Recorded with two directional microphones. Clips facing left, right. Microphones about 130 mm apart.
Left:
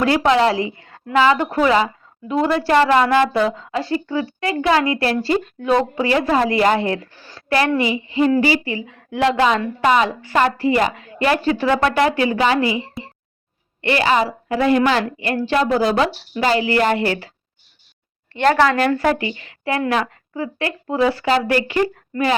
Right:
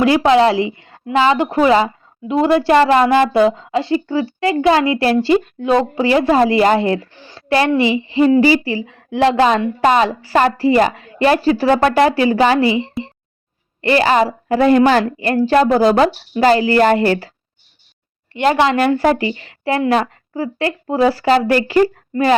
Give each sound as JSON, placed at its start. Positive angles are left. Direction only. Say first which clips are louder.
{"t": 0.0, "sound": "a woman's voice", "louder": "right 4 dB", "side_deg": -20}
{"t": 18.3, "sound": "a woman's voice", "louder": "right 1 dB", "side_deg": -15}